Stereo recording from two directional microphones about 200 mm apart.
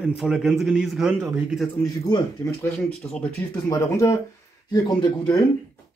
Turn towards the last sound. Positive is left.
turn(degrees=20)  # may be behind; listen again after turning